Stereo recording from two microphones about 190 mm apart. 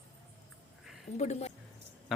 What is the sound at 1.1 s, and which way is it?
Speech, 35° left (ahead or behind).